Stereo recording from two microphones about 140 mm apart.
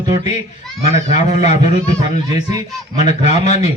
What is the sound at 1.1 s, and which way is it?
A man's voice, 55° left (ahead or behind).